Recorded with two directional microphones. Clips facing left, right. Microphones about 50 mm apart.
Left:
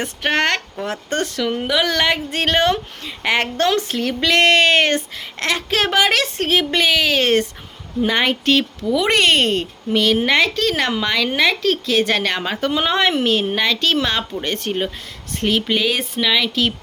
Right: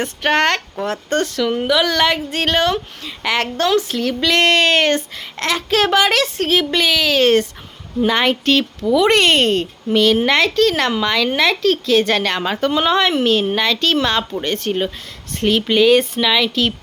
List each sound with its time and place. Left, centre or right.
0.2 s speech: centre
0.9 s speech: left
1.4 s speech: centre
5.1 s speech: centre
12.9 s speech: left
13.1 s speech: centre
14.4 s speech: left
15.4 s speech: centre